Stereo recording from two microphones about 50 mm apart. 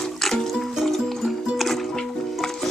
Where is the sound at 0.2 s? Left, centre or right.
Centre.